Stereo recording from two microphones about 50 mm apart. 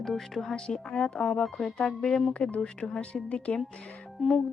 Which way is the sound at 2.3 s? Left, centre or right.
Left.